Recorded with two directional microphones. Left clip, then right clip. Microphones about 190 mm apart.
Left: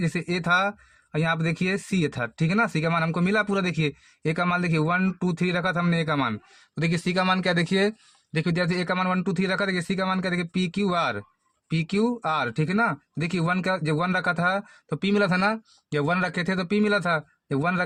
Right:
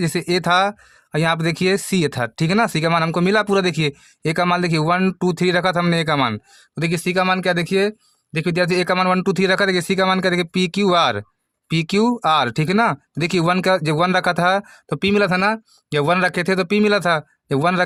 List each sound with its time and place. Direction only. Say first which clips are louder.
0.0 s speech: right 8 dB; 45° right (ahead or behind)